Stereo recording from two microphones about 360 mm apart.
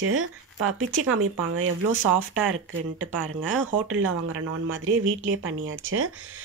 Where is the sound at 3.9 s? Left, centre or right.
Right.